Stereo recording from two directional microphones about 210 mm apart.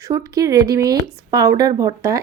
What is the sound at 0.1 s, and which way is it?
Speech, 15° right (ahead or behind).